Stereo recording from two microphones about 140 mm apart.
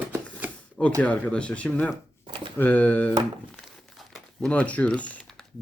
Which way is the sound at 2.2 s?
40° right (ahead or behind).